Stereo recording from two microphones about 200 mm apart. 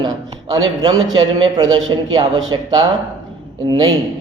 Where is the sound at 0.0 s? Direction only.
20° right (ahead or behind).